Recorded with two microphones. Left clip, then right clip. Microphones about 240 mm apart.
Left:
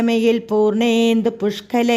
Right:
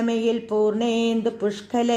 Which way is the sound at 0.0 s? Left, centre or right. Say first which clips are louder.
Left 6 dB; left.